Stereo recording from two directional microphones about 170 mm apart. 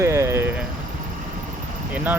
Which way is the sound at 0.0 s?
15° right (ahead or behind).